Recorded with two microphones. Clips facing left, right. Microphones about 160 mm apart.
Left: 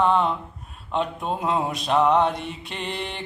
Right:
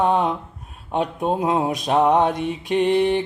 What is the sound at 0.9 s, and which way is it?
Speech, 45° right (ahead or behind).